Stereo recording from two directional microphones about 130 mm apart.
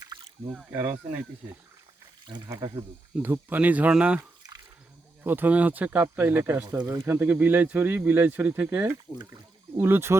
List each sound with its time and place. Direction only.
0.7 s speech: 15° right (ahead or behind)
2.2 s speech: 35° right (ahead or behind)
3.2 s speech: 15° right (ahead or behind)